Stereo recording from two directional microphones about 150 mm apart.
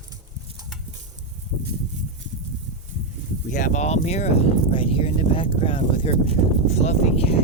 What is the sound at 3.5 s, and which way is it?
Speech, 60° left (ahead or behind).